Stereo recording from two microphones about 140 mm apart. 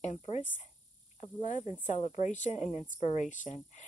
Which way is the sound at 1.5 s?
55° left (ahead or behind).